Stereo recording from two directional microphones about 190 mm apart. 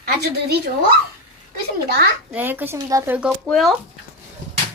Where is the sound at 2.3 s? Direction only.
10° right (ahead or behind).